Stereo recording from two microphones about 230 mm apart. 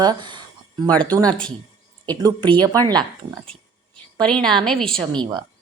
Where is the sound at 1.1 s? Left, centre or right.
Centre.